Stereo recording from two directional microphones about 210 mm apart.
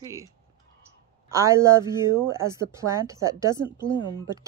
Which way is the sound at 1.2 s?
15° right (ahead or behind).